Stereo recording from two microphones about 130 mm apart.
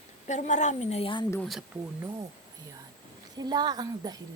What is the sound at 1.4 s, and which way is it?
Speech, centre (ahead or behind).